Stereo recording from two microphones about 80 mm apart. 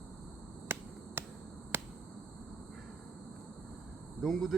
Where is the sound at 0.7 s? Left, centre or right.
Right.